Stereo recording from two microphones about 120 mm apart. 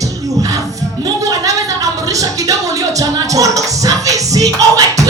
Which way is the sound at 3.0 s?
30° right (ahead or behind).